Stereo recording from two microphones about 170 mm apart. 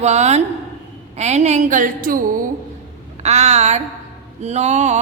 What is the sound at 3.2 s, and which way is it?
A woman's voice, 40° right (ahead or behind).